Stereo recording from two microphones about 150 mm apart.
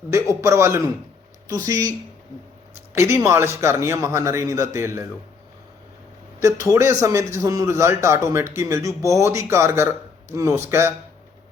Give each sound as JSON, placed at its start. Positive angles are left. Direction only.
{"t": 0.4, "sound": "speech", "side_deg": -20}
{"t": 2.9, "sound": "a man's voice", "side_deg": -15}
{"t": 6.4, "sound": "a man's voice", "side_deg": -20}